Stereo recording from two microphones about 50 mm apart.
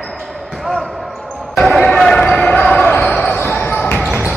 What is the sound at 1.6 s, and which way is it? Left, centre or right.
Basketball bounce, centre.